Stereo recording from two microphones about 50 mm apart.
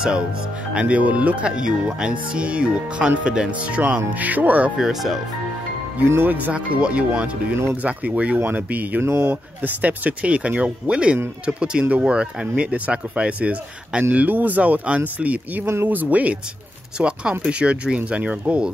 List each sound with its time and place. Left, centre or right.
0.7 s speech: right
4.7 s speech: centre
6.2 s speech: right
6.5 s speech: right
15.6 s speech: right